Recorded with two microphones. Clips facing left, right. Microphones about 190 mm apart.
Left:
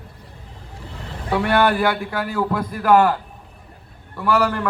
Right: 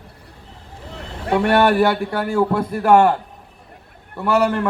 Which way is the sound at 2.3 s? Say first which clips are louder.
Right 5 dB; 25° right (ahead or behind).